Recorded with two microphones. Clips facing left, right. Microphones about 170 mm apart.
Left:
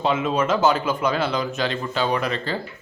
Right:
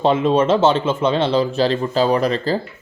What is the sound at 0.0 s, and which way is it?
Speech, 30° right (ahead or behind).